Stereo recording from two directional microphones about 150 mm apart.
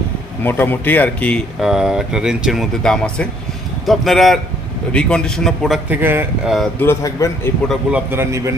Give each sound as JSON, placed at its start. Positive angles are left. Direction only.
{"t": 0.4, "sound": "speech", "side_deg": 15}
{"t": 1.6, "sound": "speech", "side_deg": -5}
{"t": 5.9, "sound": "a man's voice", "side_deg": -15}
{"t": 6.7, "sound": "speech", "side_deg": 20}
{"t": 7.7, "sound": "a man's voice", "side_deg": -5}